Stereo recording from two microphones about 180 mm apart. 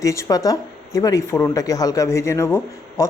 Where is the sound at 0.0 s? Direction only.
15° left (ahead or behind).